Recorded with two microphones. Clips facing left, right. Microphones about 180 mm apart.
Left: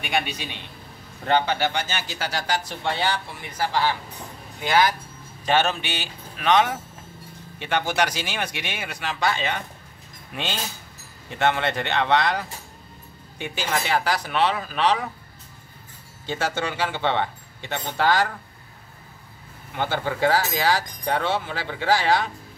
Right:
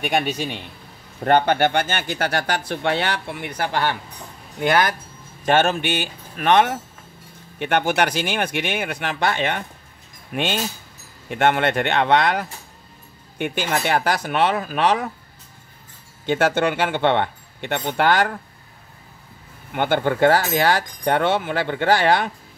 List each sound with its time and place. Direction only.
0.0 s speech: 45° right (ahead or behind)
16.3 s speech: 55° right (ahead or behind)
19.7 s speech: 60° right (ahead or behind)